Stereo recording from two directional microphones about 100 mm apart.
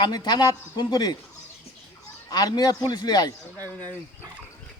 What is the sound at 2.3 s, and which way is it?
A man's voice, 40° left (ahead or behind).